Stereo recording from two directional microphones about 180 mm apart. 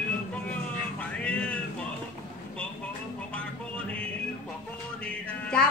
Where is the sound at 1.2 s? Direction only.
5° left (ahead or behind).